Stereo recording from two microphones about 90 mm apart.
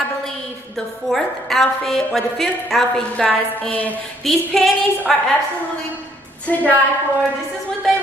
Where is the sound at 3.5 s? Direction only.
15° left (ahead or behind).